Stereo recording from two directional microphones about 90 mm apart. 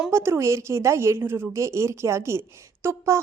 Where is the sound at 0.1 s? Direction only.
30° right (ahead or behind).